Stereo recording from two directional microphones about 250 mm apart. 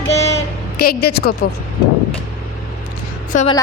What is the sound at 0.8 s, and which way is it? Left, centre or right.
Speech, left.